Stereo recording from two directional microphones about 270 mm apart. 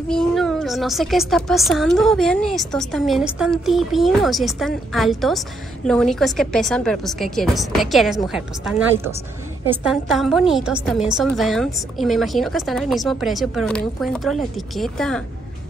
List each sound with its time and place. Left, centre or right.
0.1 s a woman's voice: centre